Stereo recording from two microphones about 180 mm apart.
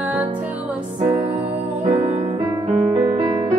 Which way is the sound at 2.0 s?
30° right (ahead or behind).